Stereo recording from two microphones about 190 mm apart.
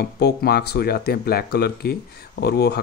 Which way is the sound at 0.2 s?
55° left (ahead or behind).